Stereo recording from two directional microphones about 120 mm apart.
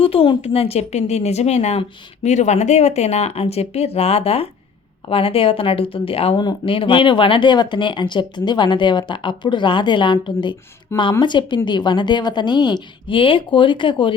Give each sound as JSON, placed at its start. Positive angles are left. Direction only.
{"t": 0.0, "sound": "speech", "side_deg": 50}